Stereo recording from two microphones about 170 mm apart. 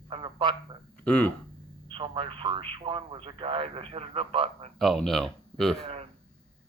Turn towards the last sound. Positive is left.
turn(degrees=0)  # may be behind; listen again after turning